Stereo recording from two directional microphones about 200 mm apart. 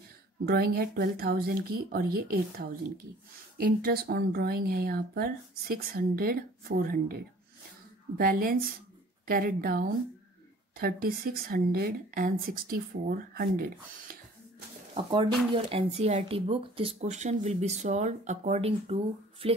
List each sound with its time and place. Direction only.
0.5 s speech: 50° right (ahead or behind)
8.2 s speech: 45° right (ahead or behind)
15.0 s speech: 25° right (ahead or behind)